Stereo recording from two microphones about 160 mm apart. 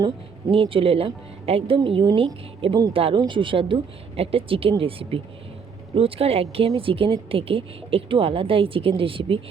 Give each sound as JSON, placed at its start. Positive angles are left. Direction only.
{"t": 0.5, "sound": "a woman's voice", "side_deg": -35}